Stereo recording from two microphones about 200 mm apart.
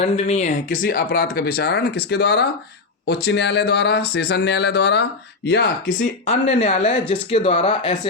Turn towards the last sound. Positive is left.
turn(degrees=35)  # may be behind; listen again after turning